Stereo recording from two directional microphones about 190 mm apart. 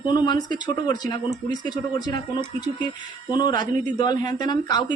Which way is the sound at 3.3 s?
20° left (ahead or behind).